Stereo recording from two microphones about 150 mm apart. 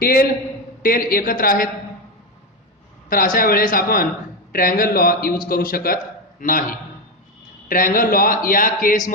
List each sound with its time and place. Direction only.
0.0 s a man's voice: 75° left (ahead or behind)
3.1 s a man's voice: 70° left (ahead or behind)